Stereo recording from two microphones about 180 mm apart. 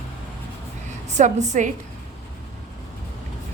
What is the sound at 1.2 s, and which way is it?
Speech, 40° right (ahead or behind).